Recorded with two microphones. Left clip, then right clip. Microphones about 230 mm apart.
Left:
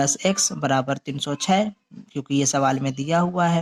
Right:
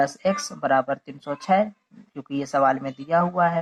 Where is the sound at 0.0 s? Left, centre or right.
Left.